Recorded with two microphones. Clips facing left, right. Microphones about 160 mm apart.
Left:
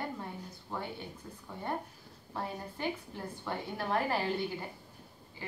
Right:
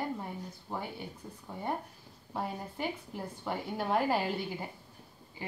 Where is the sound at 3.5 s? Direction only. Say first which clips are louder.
Right 2 dB; 15° right (ahead or behind).